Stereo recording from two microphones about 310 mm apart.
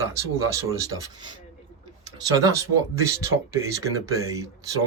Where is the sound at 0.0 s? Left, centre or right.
Centre.